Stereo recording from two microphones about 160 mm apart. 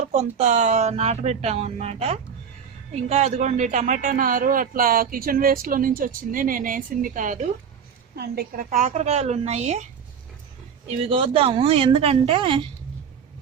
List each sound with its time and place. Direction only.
0.1 s speech: 45° right (ahead or behind)
8.1 s a woman's voice: 75° right (ahead or behind)
8.7 s speech: 45° right (ahead or behind)
10.8 s a woman's voice: 35° right (ahead or behind)